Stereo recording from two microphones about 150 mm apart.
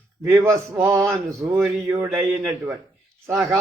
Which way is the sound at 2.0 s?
10° right (ahead or behind).